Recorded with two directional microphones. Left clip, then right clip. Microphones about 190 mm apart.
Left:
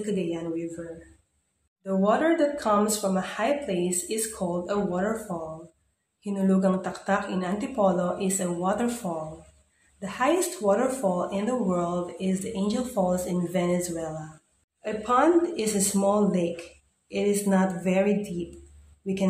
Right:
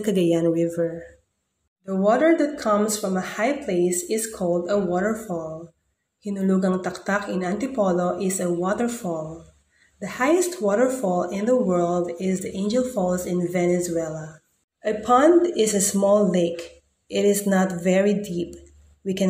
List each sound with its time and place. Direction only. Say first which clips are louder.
0.1 s speech: right 10 dB; 35° right (ahead or behind)
1.9 s speech: right 4 dB; 15° right (ahead or behind)
6.2 s speech: right 1 dB; 15° right (ahead or behind)